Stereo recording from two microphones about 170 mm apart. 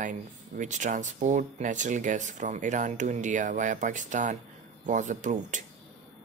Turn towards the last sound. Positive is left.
turn(degrees=-45)  # may be behind; listen again after turning